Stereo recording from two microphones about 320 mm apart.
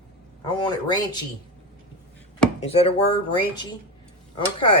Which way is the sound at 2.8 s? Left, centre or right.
Centre.